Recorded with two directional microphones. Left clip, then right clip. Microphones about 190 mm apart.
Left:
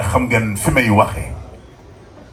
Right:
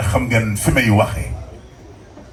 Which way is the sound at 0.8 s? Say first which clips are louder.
Left 3 dB; 40° left (ahead or behind).